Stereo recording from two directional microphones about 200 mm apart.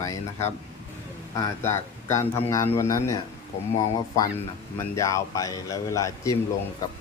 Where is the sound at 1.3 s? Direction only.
15° left (ahead or behind).